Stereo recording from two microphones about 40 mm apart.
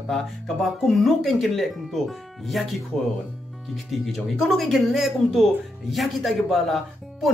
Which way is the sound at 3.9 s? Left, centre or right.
Centre.